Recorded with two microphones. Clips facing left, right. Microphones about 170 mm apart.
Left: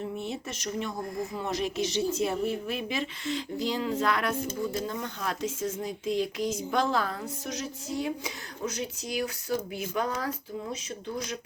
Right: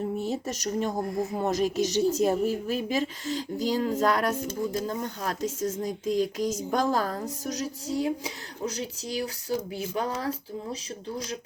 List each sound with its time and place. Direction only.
0.2 s speech: 40° right (ahead or behind)